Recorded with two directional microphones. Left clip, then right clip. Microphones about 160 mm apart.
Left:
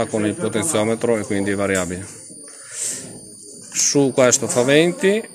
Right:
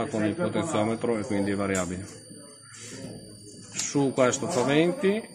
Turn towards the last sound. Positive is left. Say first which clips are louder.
# left 8 dB
turn(degrees=45)  # may be behind; listen again after turning